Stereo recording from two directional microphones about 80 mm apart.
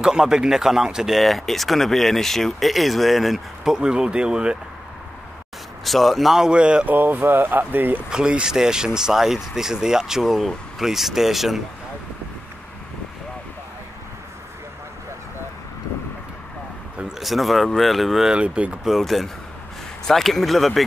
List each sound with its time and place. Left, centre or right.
0.0 s speech: centre
5.9 s speech: centre
6.9 s speech: right
8.1 s speech: centre
17.2 s speech: centre
18.9 s speech: centre